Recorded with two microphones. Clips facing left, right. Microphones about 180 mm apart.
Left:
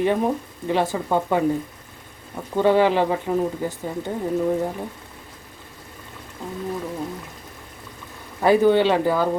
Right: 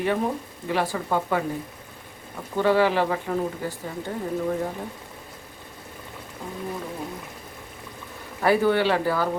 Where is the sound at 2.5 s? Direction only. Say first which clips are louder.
Left 3 dB; 20° left (ahead or behind).